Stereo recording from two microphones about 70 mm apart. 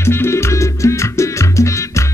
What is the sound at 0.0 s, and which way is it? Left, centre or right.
Music, left.